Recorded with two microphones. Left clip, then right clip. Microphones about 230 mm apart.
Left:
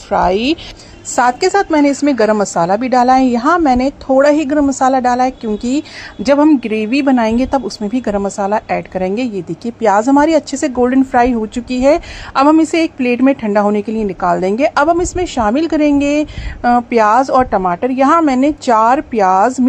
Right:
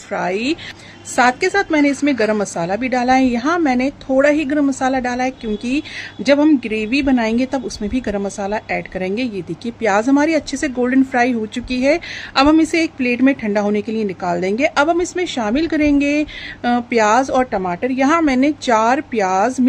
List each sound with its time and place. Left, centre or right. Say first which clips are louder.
0.2 s a woman's voice: left 5 dB; centre